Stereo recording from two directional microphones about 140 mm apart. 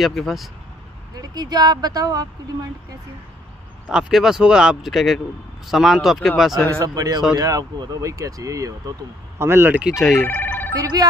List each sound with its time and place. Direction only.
0.0 s speech: centre (ahead or behind)
1.1 s speech: 30° right (ahead or behind)
3.9 s speech: 5° right (ahead or behind)
6.8 s speech: 25° right (ahead or behind); by 10.2 s 5° right (ahead or behind)
10.2 s ringtone: 15° left (ahead or behind)
10.8 s speech: 25° right (ahead or behind)